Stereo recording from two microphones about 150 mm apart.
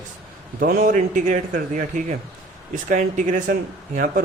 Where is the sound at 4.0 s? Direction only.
70° right (ahead or behind).